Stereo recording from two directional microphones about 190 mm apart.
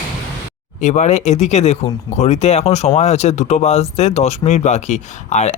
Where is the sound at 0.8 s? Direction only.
40° left (ahead or behind).